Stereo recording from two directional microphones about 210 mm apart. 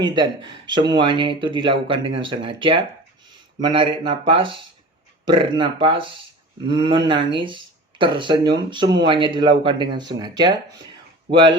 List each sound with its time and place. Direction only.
0.0 s speech: 20° right (ahead or behind)